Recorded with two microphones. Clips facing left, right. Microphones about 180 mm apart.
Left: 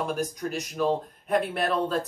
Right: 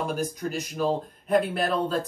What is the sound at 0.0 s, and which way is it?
Speech, centre (ahead or behind).